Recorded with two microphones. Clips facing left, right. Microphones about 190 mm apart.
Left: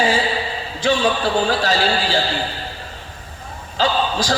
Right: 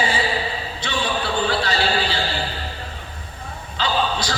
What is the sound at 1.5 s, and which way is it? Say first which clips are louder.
Speech: left 3 dB; 45° left (ahead or behind).